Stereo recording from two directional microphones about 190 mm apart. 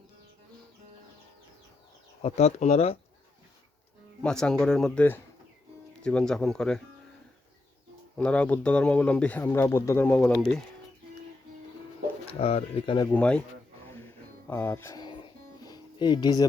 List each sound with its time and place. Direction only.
2.2 s speech: 35° left (ahead or behind)
4.2 s speech: 5° left (ahead or behind)
8.1 s speech: 5° left (ahead or behind)
12.3 s speech: 30° left (ahead or behind)
13.1 s speech: 5° left (ahead or behind)
14.4 s music: 10° left (ahead or behind)